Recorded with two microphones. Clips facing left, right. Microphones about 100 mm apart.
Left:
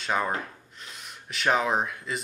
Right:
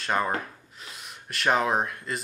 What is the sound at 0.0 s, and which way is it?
Speech, centre (ahead or behind).